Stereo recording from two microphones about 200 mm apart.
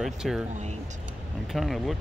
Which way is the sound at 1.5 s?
Centre (ahead or behind).